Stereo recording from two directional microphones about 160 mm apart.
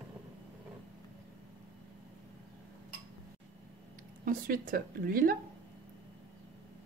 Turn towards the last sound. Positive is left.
turn(degrees=-65)  # may be behind; listen again after turning